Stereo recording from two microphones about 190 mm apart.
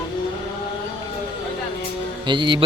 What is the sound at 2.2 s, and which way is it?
Speech, 25° right (ahead or behind).